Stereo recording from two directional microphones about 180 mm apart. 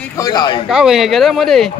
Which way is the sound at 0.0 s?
20° left (ahead or behind).